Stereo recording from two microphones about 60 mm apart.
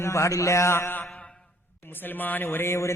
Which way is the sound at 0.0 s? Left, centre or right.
Left.